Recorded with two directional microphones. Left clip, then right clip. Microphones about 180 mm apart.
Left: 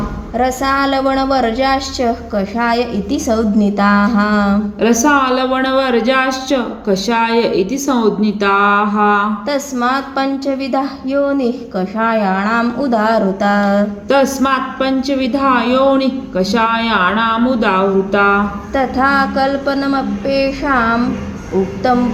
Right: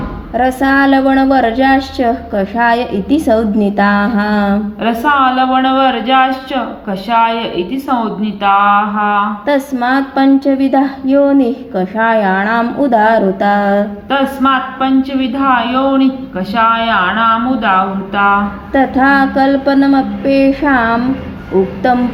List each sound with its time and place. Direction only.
0.3 s a woman's voice: 15° right (ahead or behind)
4.8 s a man's voice: 45° left (ahead or behind)
8.4 s a man's voice: 50° left (ahead or behind)
9.5 s a woman's voice: 20° right (ahead or behind)
14.1 s a man's voice: 55° left (ahead or behind)
18.7 s a woman's voice: 25° right (ahead or behind)